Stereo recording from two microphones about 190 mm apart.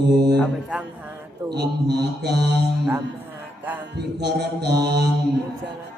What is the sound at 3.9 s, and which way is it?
Mantra, 60° right (ahead or behind).